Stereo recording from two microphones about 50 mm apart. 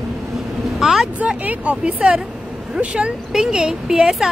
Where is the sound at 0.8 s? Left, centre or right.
Centre.